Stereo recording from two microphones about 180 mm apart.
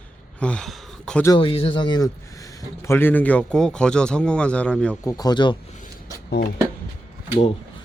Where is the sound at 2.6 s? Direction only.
15° left (ahead or behind).